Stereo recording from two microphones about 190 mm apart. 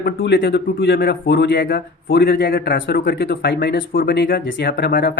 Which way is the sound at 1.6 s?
50° left (ahead or behind).